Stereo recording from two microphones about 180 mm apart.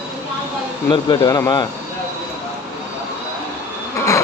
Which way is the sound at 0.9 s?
25° left (ahead or behind).